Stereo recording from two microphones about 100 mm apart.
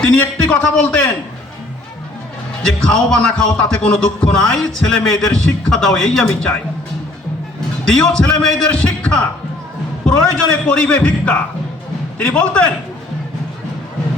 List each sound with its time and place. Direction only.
0.0 s music: 15° left (ahead or behind)
2.6 s music: 5° left (ahead or behind)
7.9 s music: 5° left (ahead or behind)